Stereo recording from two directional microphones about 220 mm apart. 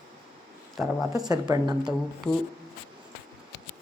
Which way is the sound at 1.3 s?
20° right (ahead or behind).